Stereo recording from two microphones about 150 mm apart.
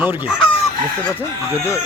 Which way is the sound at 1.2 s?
15° left (ahead or behind).